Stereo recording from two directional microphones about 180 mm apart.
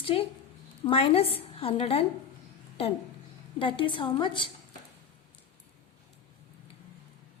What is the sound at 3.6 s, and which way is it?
Speech, 25° left (ahead or behind).